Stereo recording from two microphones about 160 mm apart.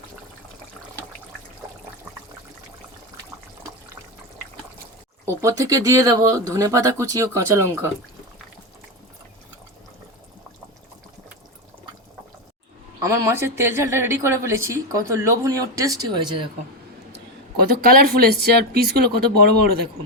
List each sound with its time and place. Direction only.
5.2 s speech: 20° right (ahead or behind)
13.0 s a woman's voice: 15° right (ahead or behind)
17.6 s speech: 70° right (ahead or behind)